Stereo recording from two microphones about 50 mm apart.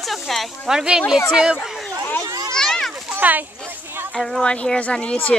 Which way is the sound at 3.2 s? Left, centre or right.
Right.